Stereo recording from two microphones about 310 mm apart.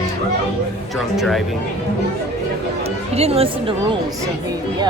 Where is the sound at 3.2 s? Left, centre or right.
Centre.